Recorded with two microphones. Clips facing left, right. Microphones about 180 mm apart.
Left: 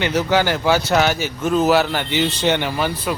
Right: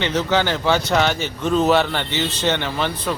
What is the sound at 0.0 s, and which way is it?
Speech, 10° left (ahead or behind).